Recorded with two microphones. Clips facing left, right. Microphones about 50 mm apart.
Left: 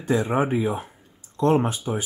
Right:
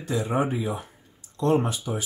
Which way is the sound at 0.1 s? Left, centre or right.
Left.